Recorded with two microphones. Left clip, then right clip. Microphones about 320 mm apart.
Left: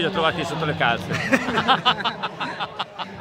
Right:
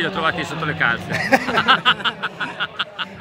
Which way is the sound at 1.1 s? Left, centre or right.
Centre.